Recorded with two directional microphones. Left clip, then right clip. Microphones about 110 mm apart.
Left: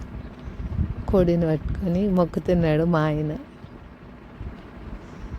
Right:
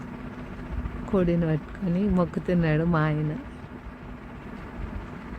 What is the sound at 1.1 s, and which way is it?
Speech, 60° left (ahead or behind).